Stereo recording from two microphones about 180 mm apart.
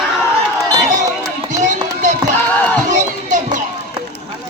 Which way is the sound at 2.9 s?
45° right (ahead or behind).